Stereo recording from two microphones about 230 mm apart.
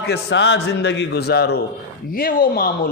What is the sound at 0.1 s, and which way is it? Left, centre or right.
A man's voice, left.